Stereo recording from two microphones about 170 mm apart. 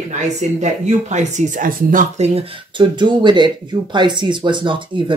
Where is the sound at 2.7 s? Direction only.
25° right (ahead or behind).